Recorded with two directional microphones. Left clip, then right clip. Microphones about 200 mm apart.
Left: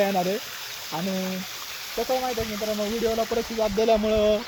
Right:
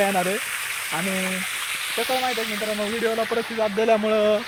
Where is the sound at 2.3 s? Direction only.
65° left (ahead or behind).